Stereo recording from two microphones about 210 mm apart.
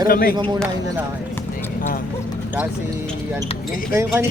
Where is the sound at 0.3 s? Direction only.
20° right (ahead or behind).